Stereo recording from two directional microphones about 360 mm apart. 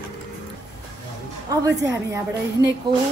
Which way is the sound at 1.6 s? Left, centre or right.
Centre.